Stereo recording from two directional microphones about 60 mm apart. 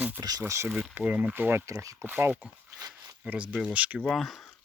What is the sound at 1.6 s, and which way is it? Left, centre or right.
Speech, right.